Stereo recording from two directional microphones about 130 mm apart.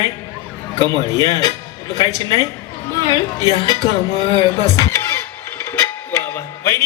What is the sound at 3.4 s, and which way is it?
Speech, 30° right (ahead or behind).